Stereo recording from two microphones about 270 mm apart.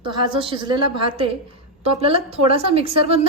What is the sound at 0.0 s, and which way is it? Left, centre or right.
A woman's voice, centre.